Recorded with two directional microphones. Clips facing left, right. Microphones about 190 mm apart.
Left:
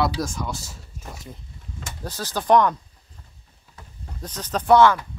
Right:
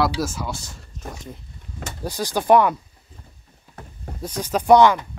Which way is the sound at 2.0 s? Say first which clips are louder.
Right 5 dB; 15° right (ahead or behind).